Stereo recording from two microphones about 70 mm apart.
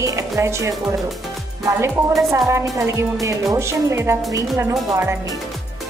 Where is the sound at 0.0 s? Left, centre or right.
Right.